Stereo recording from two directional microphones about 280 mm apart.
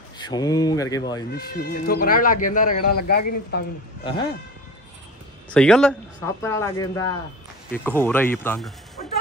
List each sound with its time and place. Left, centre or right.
0.2 s speech: centre
1.3 s speech: left
5.5 s speech: centre